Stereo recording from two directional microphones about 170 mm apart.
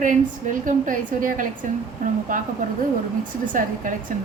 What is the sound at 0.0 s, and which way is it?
A woman's voice, 50° right (ahead or behind).